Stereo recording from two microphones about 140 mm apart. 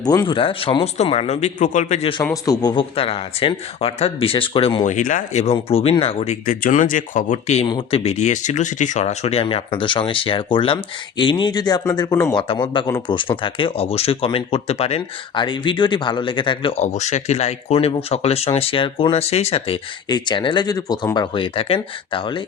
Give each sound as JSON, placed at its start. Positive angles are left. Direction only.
{"t": 0.0, "sound": "speech", "side_deg": 30}
{"t": 2.3, "sound": "speech", "side_deg": 25}
{"t": 2.9, "sound": "speech", "side_deg": 45}
{"t": 4.8, "sound": "speech", "side_deg": 60}
{"t": 6.4, "sound": "speech", "side_deg": 70}
{"t": 7.7, "sound": "speech", "side_deg": 40}
{"t": 12.3, "sound": "speech", "side_deg": 35}
{"t": 16.8, "sound": "speech", "side_deg": 55}